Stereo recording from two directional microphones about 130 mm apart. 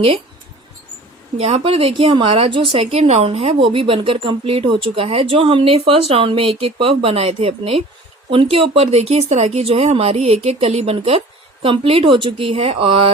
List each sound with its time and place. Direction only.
1.4 s speech: 55° right (ahead or behind)
2.8 s speech: 55° right (ahead or behind)